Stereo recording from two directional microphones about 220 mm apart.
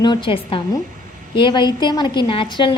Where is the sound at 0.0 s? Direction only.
20° left (ahead or behind).